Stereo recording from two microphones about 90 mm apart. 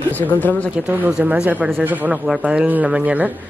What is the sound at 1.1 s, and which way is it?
A woman's voice, 15° right (ahead or behind).